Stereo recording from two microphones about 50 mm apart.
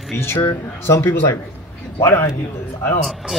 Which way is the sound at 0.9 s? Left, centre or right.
Left.